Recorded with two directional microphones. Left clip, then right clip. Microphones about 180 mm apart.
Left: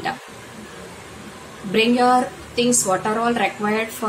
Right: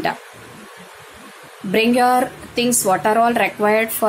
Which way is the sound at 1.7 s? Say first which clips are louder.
Right 1 dB; 45° right (ahead or behind).